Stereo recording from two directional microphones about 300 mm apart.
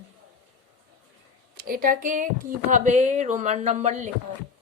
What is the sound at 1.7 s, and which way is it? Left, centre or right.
Speech, right.